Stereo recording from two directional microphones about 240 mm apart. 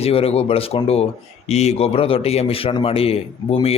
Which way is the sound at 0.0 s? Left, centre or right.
Left.